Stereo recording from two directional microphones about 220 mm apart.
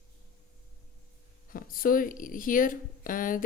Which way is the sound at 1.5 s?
40° left (ahead or behind).